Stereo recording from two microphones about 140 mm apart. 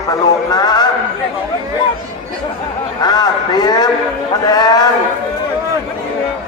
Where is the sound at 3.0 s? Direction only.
30° left (ahead or behind).